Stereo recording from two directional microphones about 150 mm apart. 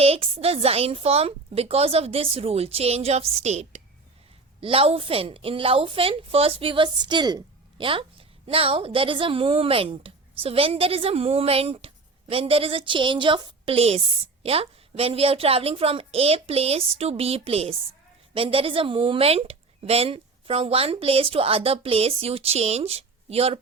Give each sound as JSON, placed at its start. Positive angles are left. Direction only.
{"t": 0.0, "sound": "a woman's voice", "side_deg": -40}